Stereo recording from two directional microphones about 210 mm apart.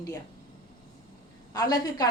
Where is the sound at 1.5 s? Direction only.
20° left (ahead or behind).